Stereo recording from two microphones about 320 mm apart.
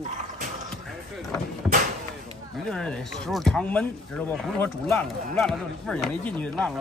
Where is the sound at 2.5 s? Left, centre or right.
Centre.